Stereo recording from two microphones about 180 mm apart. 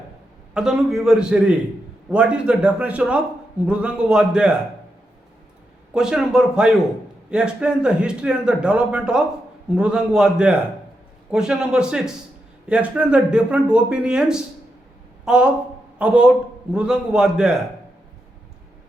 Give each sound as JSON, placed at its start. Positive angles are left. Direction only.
{"t": 0.5, "sound": "a man's voice", "side_deg": -5}
{"t": 5.9, "sound": "a man's voice", "side_deg": -5}